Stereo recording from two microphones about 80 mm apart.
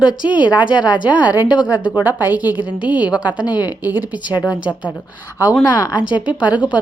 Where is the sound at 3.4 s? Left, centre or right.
Left.